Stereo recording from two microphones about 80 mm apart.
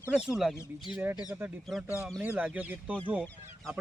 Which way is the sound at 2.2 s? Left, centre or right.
Centre.